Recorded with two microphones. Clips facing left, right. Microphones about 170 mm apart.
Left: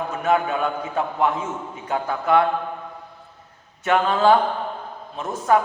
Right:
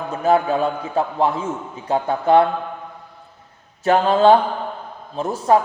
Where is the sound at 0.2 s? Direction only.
35° right (ahead or behind).